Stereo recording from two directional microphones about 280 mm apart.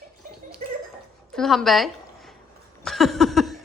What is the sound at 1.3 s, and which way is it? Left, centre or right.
Speech, centre.